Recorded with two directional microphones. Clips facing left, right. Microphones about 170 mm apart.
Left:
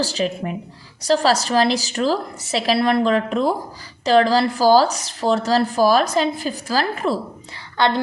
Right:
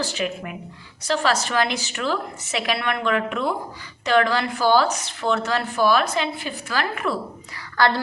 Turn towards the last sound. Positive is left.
turn(degrees=20)  # may be behind; listen again after turning